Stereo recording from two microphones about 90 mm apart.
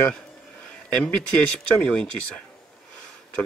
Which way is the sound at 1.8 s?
15° left (ahead or behind).